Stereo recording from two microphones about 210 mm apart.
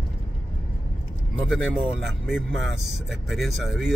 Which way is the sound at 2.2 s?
Centre (ahead or behind).